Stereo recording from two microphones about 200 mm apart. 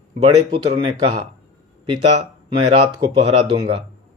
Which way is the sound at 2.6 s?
30° right (ahead or behind).